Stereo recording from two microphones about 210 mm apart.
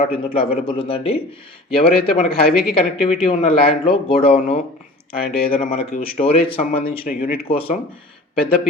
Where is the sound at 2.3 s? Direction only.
45° left (ahead or behind).